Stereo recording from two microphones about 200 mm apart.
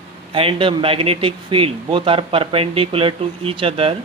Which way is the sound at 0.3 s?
25° right (ahead or behind).